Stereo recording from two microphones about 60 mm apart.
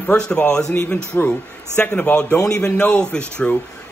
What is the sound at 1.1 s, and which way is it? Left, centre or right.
Speech, left.